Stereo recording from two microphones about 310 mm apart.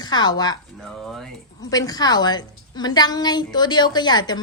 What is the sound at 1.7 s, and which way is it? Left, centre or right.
A woman's voice, centre.